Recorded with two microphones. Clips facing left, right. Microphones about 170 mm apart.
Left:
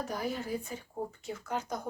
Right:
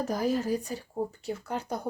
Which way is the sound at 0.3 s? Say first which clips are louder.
Right 7 dB; 40° right (ahead or behind).